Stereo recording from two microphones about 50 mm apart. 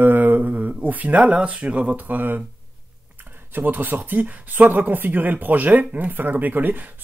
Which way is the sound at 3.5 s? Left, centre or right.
Right.